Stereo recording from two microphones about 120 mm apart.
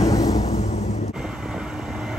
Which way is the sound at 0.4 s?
65° left (ahead or behind).